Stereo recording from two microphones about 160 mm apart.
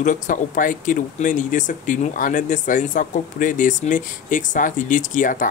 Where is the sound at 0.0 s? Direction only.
55° left (ahead or behind).